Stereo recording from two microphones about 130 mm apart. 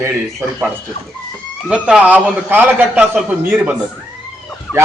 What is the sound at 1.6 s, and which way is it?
A man's voice, 10° right (ahead or behind).